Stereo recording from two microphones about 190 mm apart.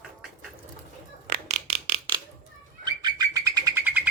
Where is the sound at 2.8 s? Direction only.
20° right (ahead or behind).